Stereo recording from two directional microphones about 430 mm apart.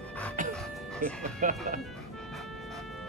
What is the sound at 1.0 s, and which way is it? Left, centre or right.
Speech, centre.